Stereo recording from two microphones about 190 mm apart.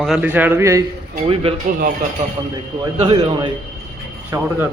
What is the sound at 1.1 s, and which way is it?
Speech, 30° right (ahead or behind).